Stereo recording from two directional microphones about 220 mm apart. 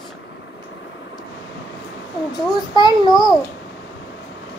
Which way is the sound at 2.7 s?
20° left (ahead or behind).